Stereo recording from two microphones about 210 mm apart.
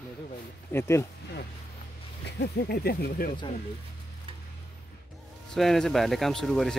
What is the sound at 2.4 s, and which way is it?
Speech, 50° left (ahead or behind).